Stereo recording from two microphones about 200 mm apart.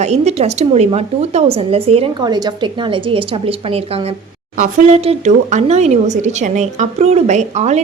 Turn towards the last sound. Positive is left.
turn(degrees=-35)  # may be behind; listen again after turning